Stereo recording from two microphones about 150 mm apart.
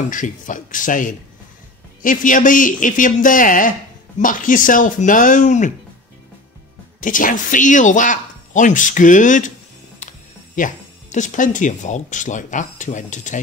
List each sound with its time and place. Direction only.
0.1 s speech: 60° left (ahead or behind)
7.0 s speech: 60° left (ahead or behind)
10.5 s speech: 60° left (ahead or behind)